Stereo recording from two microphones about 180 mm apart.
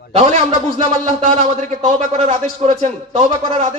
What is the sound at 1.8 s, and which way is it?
Speech, 35° right (ahead or behind).